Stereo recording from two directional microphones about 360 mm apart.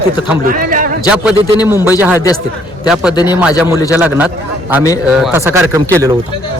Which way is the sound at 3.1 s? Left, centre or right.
Centre.